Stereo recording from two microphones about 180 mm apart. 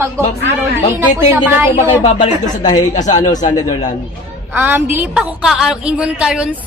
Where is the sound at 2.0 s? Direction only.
40° left (ahead or behind).